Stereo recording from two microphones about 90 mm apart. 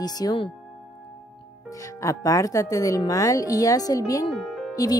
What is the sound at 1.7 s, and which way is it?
A woman's voice, 35° left (ahead or behind).